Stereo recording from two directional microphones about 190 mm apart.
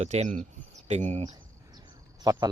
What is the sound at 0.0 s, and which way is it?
Speech, 35° right (ahead or behind).